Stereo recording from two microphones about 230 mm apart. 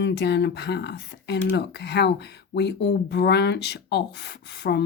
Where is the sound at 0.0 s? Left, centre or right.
Left.